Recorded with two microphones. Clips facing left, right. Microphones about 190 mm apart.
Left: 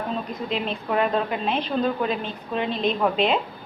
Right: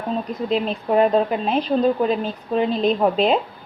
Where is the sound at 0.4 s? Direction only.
40° right (ahead or behind).